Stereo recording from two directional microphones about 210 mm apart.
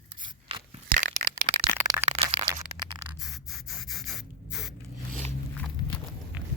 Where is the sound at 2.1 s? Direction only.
25° right (ahead or behind).